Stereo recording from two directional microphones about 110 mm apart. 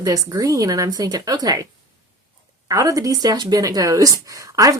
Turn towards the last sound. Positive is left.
turn(degrees=-30)  # may be behind; listen again after turning